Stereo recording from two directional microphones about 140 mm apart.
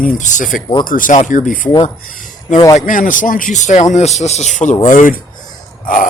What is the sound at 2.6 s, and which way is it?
Speech, 25° left (ahead or behind).